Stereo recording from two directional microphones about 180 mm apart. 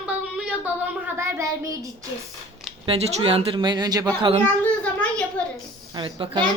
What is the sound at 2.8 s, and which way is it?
Speech, 30° right (ahead or behind).